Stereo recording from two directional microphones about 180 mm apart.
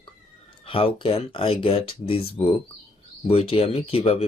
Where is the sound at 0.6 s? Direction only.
30° left (ahead or behind).